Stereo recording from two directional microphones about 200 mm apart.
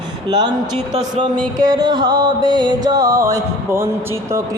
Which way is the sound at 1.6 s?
20° right (ahead or behind).